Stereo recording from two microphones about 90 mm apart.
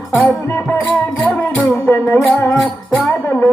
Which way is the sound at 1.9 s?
20° left (ahead or behind).